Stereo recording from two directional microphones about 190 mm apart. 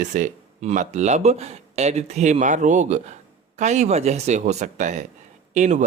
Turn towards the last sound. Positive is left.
turn(degrees=-40)  # may be behind; listen again after turning